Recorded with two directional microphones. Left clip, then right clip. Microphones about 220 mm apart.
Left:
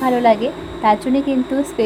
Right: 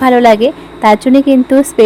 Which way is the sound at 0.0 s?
35° right (ahead or behind).